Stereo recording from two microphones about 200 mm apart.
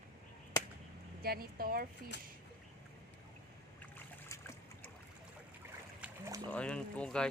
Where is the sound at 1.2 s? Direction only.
50° right (ahead or behind).